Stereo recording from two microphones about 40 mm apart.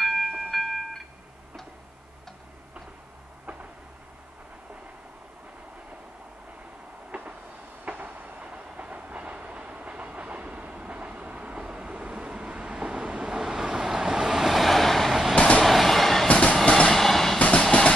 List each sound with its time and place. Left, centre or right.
0.0 s music: centre
7.1 s train: right
8.4 s train: right; by 15.1 s centre
15.3 s vehicle: left
15.6 s a sound: centre
16.3 s train: left
16.6 s train: centre
16.9 s train: centre
17.4 s train: left